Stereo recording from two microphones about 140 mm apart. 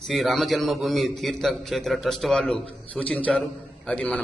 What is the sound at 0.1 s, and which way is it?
A man's voice, centre (ahead or behind).